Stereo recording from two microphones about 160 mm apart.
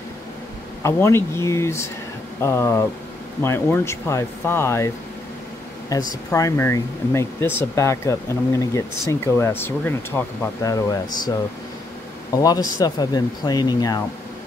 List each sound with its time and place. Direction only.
0.8 s speech: 15° left (ahead or behind)